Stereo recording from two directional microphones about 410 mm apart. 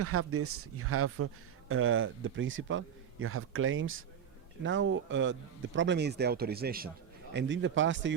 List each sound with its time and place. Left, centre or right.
0.0 s speech: right